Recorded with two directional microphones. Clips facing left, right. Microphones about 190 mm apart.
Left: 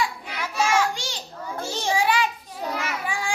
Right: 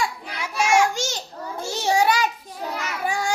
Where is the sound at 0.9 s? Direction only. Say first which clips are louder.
Right 6 dB; 45° right (ahead or behind).